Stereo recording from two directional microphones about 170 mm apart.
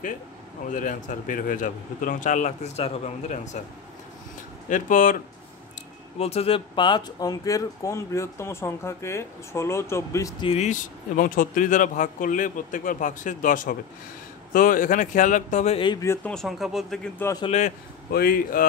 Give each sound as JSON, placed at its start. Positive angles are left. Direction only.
{"t": 0.7, "sound": "speech", "side_deg": 50}
{"t": 6.1, "sound": "speech", "side_deg": 35}
{"t": 10.4, "sound": "speech", "side_deg": 40}
{"t": 15.8, "sound": "speech", "side_deg": 25}
{"t": 16.1, "sound": "speech", "side_deg": 5}
{"t": 17.5, "sound": "speech", "side_deg": 45}
{"t": 18.1, "sound": "speech", "side_deg": 60}